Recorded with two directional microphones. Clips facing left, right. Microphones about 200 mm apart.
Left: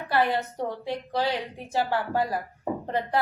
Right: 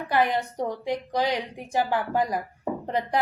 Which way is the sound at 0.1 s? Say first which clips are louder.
Right 1 dB; 15° right (ahead or behind).